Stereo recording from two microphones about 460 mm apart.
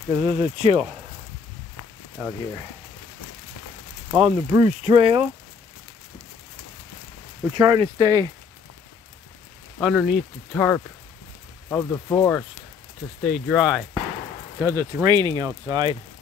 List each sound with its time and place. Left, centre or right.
0.1 s speech: centre
4.1 s speech: centre
7.5 s speech: centre
9.8 s speech: centre